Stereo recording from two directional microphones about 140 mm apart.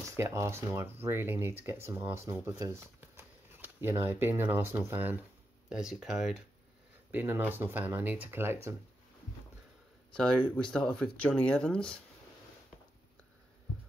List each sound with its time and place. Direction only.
0.1 s speech: 20° right (ahead or behind); by 6.4 s 5° right (ahead or behind)
7.1 s speech: 15° right (ahead or behind)
10.5 s speech: 5° left (ahead or behind)